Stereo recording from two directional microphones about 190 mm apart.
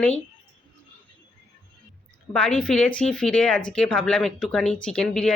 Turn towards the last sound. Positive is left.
turn(degrees=5)  # may be behind; listen again after turning